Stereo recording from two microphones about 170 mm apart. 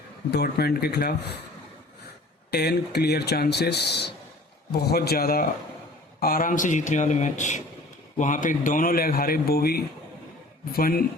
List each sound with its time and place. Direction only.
0.3 s speech: 70° left (ahead or behind)
2.5 s speech: 70° left (ahead or behind)